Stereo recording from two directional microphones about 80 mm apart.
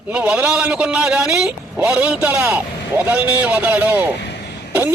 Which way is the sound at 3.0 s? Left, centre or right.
Right.